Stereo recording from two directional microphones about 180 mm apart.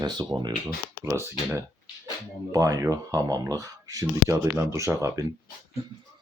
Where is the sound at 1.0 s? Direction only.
10° right (ahead or behind).